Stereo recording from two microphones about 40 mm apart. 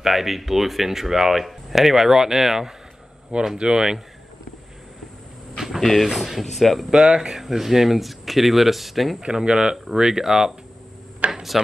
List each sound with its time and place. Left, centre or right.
0.0 s speech: centre
3.5 s speech: right
5.8 s speech: centre
6.9 s speech: centre
9.2 s speech: right
11.2 s a sound: right